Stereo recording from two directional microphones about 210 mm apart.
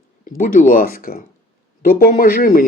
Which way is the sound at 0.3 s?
40° left (ahead or behind).